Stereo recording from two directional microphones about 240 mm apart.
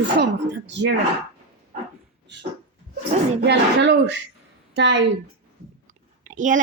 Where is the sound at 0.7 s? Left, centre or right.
Right.